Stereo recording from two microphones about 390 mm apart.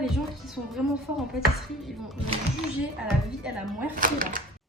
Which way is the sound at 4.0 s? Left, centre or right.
Right.